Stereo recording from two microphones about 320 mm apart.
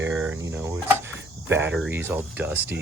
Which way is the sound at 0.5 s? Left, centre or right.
Centre.